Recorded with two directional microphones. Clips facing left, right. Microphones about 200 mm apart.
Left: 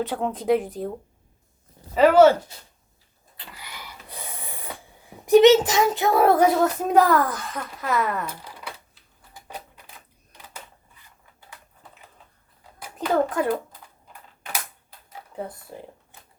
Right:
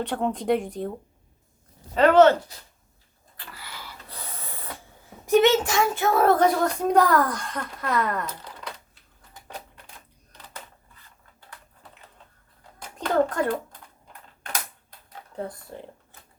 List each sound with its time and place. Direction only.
0.0 s speech: centre (ahead or behind)
2.0 s speech: 10° left (ahead or behind)
3.3 s dog: 20° left (ahead or behind)
5.0 s speech: 15° left (ahead or behind)
10.9 s a sound: 10° left (ahead or behind)
12.8 s a child's voice: 5° left (ahead or behind)
14.1 s typing: 5° left (ahead or behind)